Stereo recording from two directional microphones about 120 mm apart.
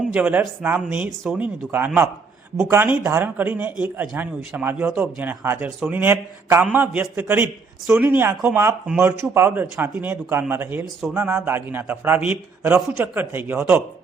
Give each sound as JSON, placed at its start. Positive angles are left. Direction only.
{"t": 0.1, "sound": "a man's voice", "side_deg": -15}